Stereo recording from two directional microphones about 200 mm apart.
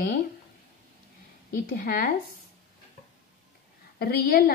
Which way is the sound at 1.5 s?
45° left (ahead or behind).